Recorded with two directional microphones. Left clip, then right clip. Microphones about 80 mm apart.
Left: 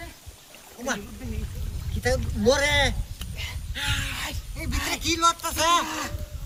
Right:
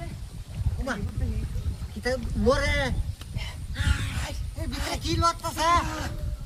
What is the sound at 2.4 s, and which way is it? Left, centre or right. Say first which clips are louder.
Speech: left 4 dB; left.